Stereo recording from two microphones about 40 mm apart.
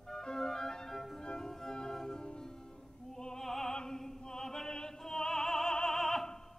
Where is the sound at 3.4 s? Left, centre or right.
Centre.